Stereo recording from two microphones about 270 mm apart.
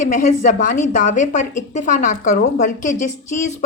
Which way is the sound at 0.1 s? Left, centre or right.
Left.